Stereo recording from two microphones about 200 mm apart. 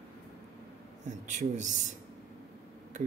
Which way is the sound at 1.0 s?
35° right (ahead or behind).